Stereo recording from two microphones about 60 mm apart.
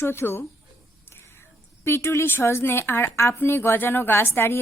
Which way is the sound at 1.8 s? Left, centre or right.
Left.